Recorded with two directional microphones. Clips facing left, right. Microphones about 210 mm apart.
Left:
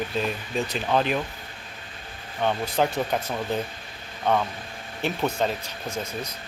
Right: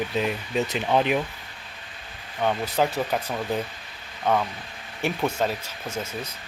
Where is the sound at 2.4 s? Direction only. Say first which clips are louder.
Even; 10° right (ahead or behind).